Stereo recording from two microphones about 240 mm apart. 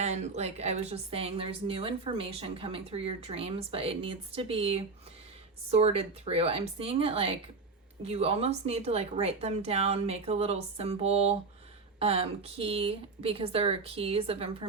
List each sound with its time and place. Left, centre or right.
0.0 s a woman's voice: right